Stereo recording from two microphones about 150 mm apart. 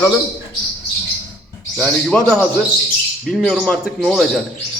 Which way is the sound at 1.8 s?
5° left (ahead or behind).